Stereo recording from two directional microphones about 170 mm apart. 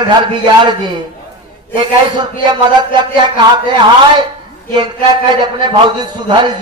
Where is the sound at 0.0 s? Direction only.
25° right (ahead or behind).